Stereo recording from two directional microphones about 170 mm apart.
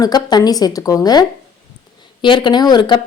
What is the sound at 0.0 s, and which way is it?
A woman's voice, 25° left (ahead or behind).